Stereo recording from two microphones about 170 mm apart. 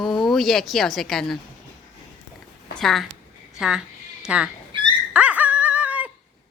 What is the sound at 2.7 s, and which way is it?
Speech, centre (ahead or behind).